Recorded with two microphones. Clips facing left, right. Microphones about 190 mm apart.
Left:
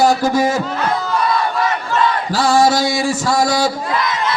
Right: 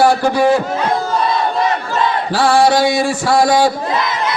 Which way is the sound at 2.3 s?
40° left (ahead or behind).